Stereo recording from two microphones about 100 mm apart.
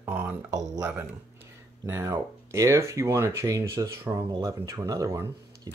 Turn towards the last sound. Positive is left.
turn(degrees=-30)  # may be behind; listen again after turning